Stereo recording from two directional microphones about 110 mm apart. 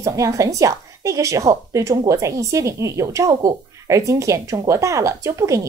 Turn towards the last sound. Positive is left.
turn(degrees=-30)  # may be behind; listen again after turning